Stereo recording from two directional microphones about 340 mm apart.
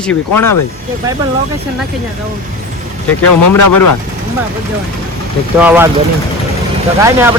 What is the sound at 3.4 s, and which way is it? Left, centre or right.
Speech, left.